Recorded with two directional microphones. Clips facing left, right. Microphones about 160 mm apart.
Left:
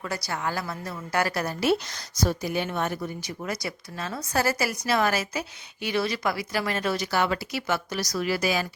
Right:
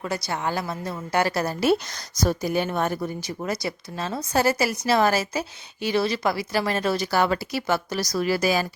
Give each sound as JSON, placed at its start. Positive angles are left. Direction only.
{"t": 0.0, "sound": "a woman's voice", "side_deg": -25}